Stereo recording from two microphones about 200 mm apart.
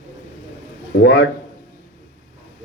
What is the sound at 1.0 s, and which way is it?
Speech, 60° left (ahead or behind).